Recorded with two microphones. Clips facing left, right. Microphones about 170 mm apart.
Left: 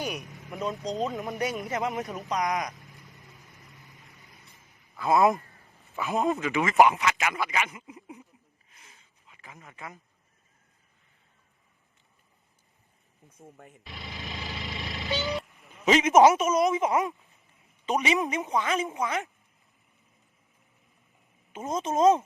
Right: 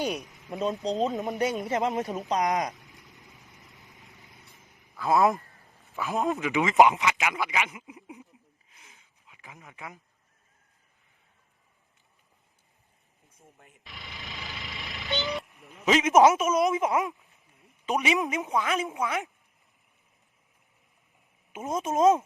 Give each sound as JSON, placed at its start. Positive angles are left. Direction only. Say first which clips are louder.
{"t": 0.2, "sound": "a man's voice", "louder": "right 3 dB", "side_deg": 0}
{"t": 1.2, "sound": "speech", "louder": "right 3 dB", "side_deg": -20}
{"t": 3.2, "sound": "vehicle", "louder": "even", "side_deg": -20}
{"t": 3.6, "sound": "vehicle", "louder": "left 1 dB", "side_deg": 0}
{"t": 4.3, "sound": "boat", "louder": "right 1 dB", "side_deg": -20}
{"t": 4.9, "sound": "a man's voice", "louder": "left 1 dB", "side_deg": 0}
{"t": 6.4, "sound": "speech", "louder": "right 2 dB", "side_deg": -20}
{"t": 8.8, "sound": "a sound", "louder": "even", "side_deg": -15}
{"t": 13.8, "sound": "a man's voice", "louder": "left 4 dB", "side_deg": 0}
{"t": 21.5, "sound": "a man's voice", "louder": "even", "side_deg": 0}